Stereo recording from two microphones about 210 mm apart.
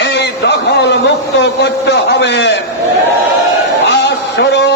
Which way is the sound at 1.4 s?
55° left (ahead or behind).